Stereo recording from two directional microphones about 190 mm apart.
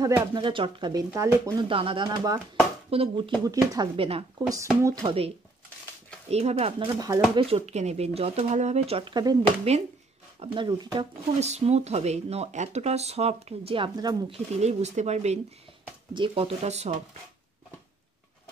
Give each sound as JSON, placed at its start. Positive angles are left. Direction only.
{"t": 0.0, "sound": "speech", "side_deg": -20}
{"t": 1.7, "sound": "speech", "side_deg": -30}
{"t": 4.5, "sound": "speech", "side_deg": -15}
{"t": 5.0, "sound": "speech", "side_deg": -30}
{"t": 6.3, "sound": "speech", "side_deg": -35}
{"t": 7.0, "sound": "speech", "side_deg": -20}
{"t": 7.4, "sound": "speech", "side_deg": -35}
{"t": 10.4, "sound": "speech", "side_deg": -25}
{"t": 11.3, "sound": "speech", "side_deg": -35}
{"t": 14.5, "sound": "speech", "side_deg": -35}